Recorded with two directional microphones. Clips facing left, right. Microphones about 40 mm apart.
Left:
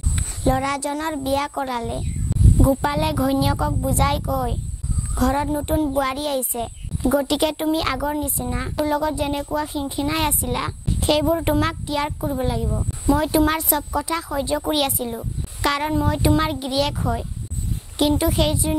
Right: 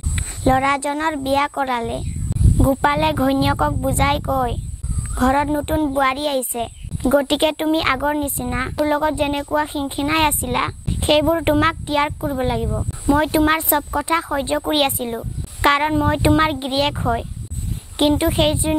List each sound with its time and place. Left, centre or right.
0.1 s a woman's voice: right
12.6 s a woman's voice: centre